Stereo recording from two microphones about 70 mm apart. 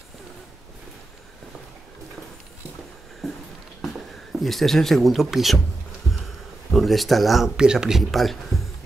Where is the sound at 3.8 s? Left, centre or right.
Centre.